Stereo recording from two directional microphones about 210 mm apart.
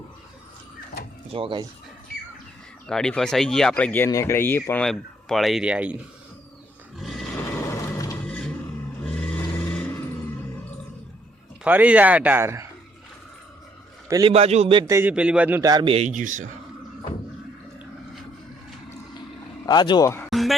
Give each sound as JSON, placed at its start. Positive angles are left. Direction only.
{"t": 1.3, "sound": "a man's voice", "side_deg": -25}
{"t": 2.8, "sound": "speech", "side_deg": 5}
{"t": 7.0, "sound": "grunt", "side_deg": 0}
{"t": 7.4, "sound": "vehicle", "side_deg": 10}
{"t": 8.2, "sound": "a sound", "side_deg": 5}
{"t": 9.0, "sound": "vehicle", "side_deg": 5}
{"t": 11.6, "sound": "speech", "side_deg": -5}
{"t": 14.1, "sound": "a man's voice", "side_deg": -20}
{"t": 19.6, "sound": "speech", "side_deg": 20}
{"t": 20.3, "sound": "a sound", "side_deg": 0}